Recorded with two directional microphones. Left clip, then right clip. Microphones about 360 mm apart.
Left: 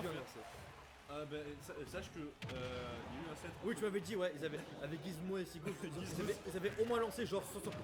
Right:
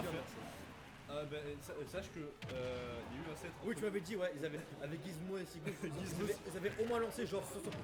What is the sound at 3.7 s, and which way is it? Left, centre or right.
Speech, left.